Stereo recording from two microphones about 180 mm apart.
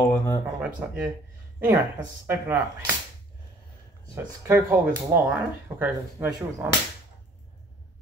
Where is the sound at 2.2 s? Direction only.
15° right (ahead or behind).